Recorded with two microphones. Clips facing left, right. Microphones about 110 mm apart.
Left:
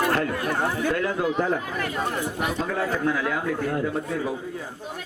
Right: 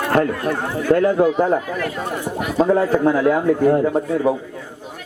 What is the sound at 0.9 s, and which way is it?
Speech, 40° right (ahead or behind).